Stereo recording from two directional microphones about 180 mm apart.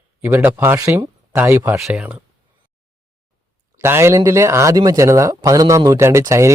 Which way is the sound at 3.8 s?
15° right (ahead or behind).